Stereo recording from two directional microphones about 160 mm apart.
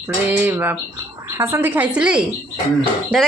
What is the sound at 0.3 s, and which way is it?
Speech, 10° right (ahead or behind).